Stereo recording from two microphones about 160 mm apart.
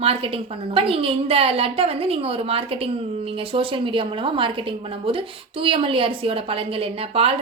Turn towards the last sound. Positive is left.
turn(degrees=-35)  # may be behind; listen again after turning